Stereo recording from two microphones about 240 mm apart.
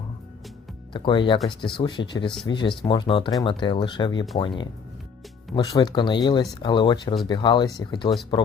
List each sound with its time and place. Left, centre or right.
0.9 s speech: centre